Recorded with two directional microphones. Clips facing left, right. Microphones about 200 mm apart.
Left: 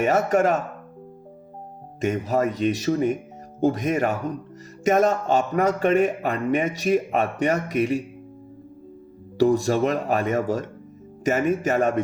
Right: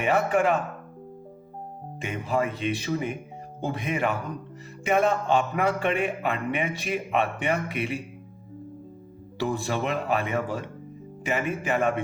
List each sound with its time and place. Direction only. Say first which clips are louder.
0.0 s a man's voice: left 3 dB; 40° left (ahead or behind)
2.0 s a man's voice: left 5 dB; 40° left (ahead or behind)
9.4 s a man's voice: left 8 dB; 40° left (ahead or behind)